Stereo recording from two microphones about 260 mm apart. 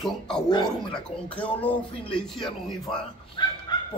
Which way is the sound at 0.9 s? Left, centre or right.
Centre.